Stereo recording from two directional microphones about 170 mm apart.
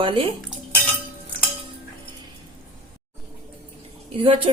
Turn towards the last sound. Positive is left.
turn(degrees=-30)  # may be behind; listen again after turning